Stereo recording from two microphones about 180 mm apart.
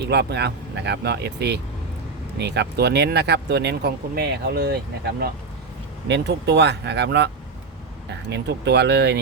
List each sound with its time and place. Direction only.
0.0 s speech: 65° right (ahead or behind)
8.3 s speech: 65° right (ahead or behind)